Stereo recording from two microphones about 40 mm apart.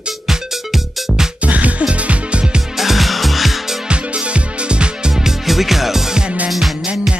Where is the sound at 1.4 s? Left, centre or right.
Right.